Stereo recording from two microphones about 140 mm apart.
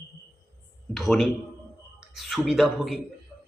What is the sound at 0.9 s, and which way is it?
Speech, centre (ahead or behind).